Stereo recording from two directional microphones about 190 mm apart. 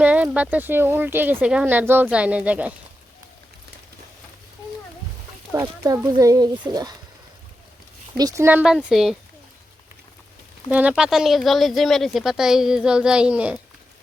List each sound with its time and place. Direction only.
0.0 s speech: 5° right (ahead or behind)
5.5 s speech: 15° right (ahead or behind)
8.2 s speech: 15° right (ahead or behind)
10.7 s speech: 10° right (ahead or behind)